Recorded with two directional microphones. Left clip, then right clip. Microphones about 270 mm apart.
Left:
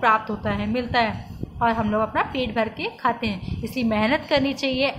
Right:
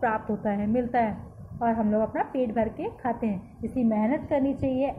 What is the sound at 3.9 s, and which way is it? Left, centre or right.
Speech, centre.